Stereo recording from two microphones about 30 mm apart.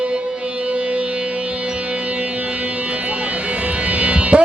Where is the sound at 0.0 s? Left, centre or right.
Right.